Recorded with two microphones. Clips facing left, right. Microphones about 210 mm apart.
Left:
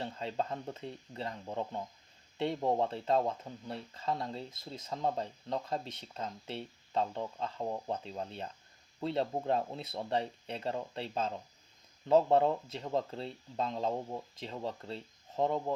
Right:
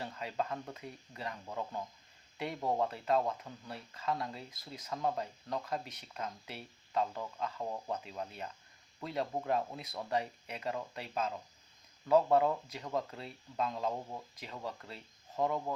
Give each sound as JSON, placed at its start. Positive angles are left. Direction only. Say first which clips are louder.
{"t": 0.0, "sound": "speech", "louder": "left 2 dB", "side_deg": 25}